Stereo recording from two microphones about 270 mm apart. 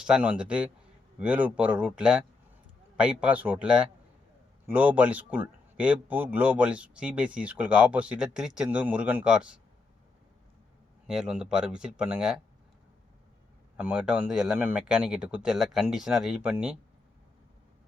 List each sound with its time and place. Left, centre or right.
0.0 s speech: centre
11.0 s speech: centre
13.7 s speech: centre